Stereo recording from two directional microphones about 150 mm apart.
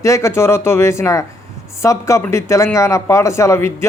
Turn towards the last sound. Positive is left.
turn(degrees=15)  # may be behind; listen again after turning